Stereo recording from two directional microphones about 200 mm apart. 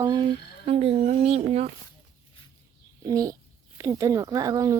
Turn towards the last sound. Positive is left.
turn(degrees=-15)  # may be behind; listen again after turning